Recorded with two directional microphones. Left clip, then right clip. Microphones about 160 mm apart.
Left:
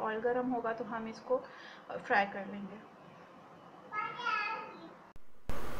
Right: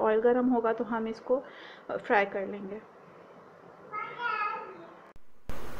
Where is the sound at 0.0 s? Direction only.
45° right (ahead or behind).